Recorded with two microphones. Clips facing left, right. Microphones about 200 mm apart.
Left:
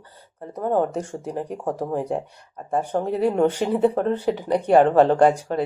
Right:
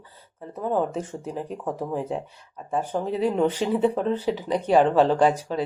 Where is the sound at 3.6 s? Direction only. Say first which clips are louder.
Left 2 dB; 40° left (ahead or behind).